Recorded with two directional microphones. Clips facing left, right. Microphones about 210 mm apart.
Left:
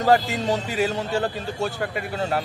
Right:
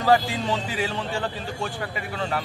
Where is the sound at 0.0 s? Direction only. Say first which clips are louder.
Left 1 dB; 45° left (ahead or behind).